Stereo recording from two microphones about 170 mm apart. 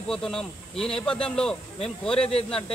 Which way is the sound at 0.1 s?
5° left (ahead or behind).